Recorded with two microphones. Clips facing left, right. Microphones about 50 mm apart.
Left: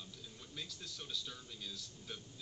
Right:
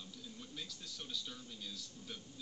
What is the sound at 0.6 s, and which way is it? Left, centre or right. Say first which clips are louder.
Speech: left 3 dB; left.